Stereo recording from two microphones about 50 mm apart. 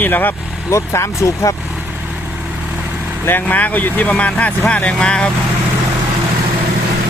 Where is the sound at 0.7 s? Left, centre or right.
Left.